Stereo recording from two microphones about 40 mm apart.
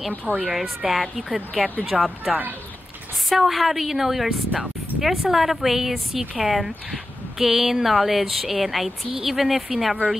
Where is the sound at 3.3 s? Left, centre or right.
Centre.